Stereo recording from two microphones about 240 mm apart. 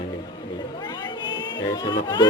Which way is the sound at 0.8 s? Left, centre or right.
Centre.